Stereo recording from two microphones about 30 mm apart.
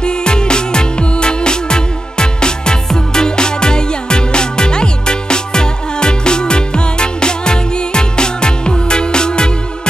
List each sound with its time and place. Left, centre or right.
0.0 s music: left